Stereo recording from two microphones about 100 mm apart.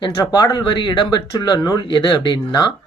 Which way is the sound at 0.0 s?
45° left (ahead or behind).